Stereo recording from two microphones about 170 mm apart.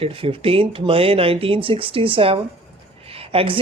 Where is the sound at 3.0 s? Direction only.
35° right (ahead or behind).